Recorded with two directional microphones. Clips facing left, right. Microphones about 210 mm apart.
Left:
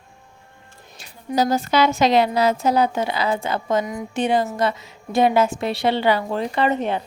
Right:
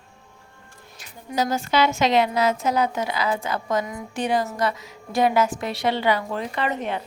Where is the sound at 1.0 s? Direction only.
30° left (ahead or behind).